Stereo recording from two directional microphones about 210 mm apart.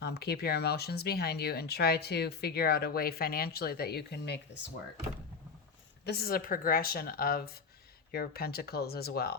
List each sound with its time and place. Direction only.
0.0 s speech: 50° left (ahead or behind)
6.1 s speech: 45° left (ahead or behind)